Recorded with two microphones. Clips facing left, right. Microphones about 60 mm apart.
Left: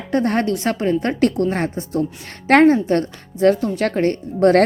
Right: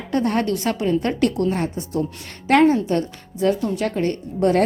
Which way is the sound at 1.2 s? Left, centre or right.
Left.